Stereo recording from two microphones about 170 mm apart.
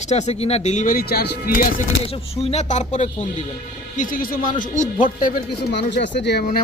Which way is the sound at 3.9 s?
55° left (ahead or behind).